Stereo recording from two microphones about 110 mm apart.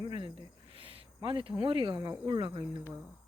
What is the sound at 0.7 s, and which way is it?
Speech, 55° right (ahead or behind).